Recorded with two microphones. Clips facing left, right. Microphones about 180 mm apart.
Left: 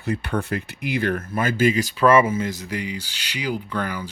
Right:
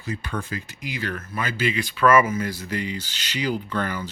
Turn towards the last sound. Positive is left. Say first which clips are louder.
# even
turn(degrees=10)  # may be behind; listen again after turning